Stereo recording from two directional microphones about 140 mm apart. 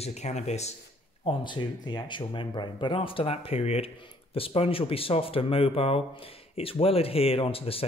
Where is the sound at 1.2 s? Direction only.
35° left (ahead or behind).